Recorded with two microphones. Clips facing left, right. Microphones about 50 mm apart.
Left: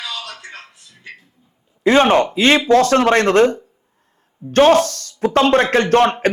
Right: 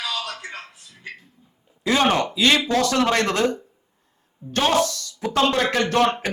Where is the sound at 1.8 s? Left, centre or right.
Left.